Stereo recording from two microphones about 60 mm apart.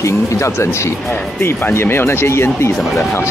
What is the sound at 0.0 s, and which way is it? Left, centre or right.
Speech, left.